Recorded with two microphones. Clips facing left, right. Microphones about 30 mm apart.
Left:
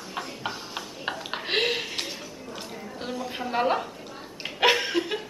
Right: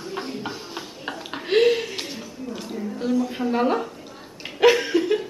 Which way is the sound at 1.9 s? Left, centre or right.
Centre.